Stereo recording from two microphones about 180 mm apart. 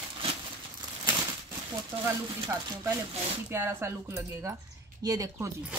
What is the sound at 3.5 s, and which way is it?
Speech, 15° right (ahead or behind).